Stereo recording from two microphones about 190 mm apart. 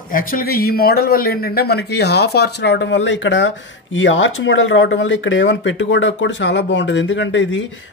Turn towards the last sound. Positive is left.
turn(degrees=75)  # may be behind; listen again after turning